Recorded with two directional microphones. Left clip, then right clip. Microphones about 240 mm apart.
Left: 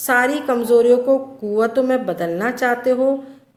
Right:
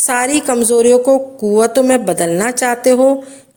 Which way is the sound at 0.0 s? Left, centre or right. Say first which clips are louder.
Right 2 dB; right.